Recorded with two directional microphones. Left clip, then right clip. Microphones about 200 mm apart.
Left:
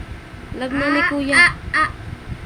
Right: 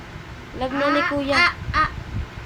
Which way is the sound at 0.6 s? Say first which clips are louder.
Left 2 dB; 10° left (ahead or behind).